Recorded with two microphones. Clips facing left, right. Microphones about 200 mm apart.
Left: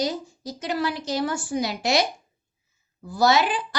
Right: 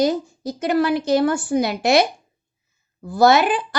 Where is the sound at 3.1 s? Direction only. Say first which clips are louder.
Right 5 dB; 55° right (ahead or behind).